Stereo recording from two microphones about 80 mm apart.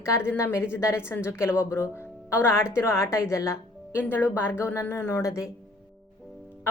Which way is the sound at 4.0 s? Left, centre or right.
Left.